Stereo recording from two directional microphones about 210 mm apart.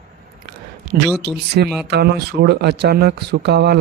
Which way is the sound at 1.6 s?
50° right (ahead or behind).